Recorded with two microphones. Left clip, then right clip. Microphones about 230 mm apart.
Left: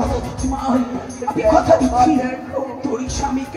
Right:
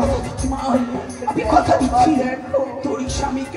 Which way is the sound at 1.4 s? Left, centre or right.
Right.